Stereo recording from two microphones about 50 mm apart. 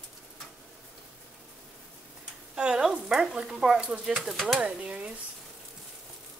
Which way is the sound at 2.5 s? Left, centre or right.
Centre.